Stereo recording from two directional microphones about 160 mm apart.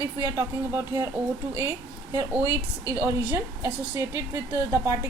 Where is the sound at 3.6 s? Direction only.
15° right (ahead or behind).